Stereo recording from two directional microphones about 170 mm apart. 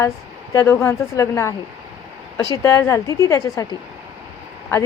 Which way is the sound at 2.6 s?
15° left (ahead or behind).